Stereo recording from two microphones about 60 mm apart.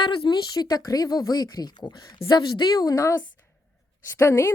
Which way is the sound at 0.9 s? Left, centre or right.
Left.